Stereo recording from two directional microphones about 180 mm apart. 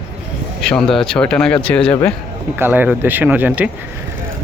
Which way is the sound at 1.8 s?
30° left (ahead or behind).